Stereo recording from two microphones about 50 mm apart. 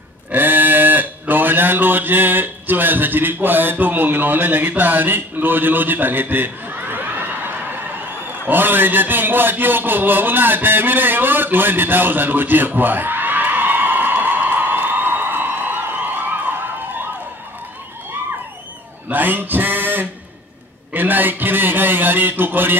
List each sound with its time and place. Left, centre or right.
0.3 s speech: right
8.3 s a sound: right
19.0 s speech: right